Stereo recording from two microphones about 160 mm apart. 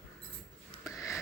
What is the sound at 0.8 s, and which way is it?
Sniff, 20° left (ahead or behind).